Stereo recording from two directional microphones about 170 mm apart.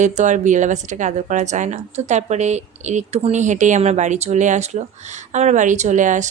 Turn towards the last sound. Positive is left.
turn(degrees=-45)  # may be behind; listen again after turning